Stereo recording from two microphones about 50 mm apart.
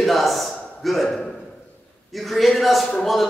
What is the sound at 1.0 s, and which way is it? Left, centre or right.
Speech, centre.